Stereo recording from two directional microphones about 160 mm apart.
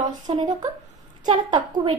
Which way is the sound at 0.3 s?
30° right (ahead or behind).